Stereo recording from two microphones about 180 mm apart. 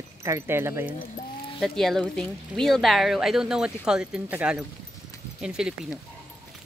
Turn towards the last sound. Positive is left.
turn(degrees=-5)  # may be behind; listen again after turning